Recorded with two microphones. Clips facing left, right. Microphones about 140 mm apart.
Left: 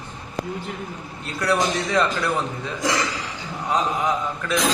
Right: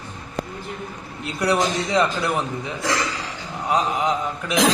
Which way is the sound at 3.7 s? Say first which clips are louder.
Right 1 dB; 20° right (ahead or behind).